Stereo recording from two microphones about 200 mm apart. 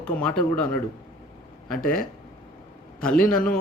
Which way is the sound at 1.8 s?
45° left (ahead or behind).